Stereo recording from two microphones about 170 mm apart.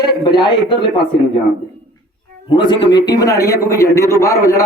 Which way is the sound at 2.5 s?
30° left (ahead or behind).